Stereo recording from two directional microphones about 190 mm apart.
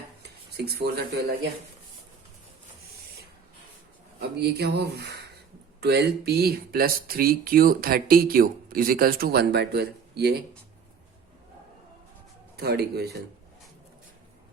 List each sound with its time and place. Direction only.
0.2 s speech: 60° right (ahead or behind)
4.4 s speech: 55° right (ahead or behind)
12.5 s speech: 55° right (ahead or behind)